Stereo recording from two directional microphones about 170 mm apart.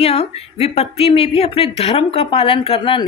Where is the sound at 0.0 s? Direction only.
35° left (ahead or behind).